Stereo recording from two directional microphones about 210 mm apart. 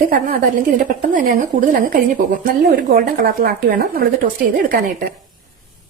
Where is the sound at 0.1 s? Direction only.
40° right (ahead or behind).